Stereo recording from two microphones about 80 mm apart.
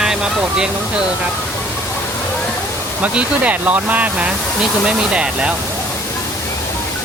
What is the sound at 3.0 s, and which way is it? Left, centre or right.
Speech, centre.